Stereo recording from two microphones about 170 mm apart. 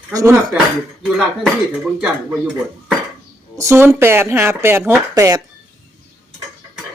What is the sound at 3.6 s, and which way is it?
Speech, 15° right (ahead or behind).